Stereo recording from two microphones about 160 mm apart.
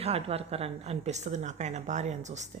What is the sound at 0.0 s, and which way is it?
A woman's voice, 40° right (ahead or behind).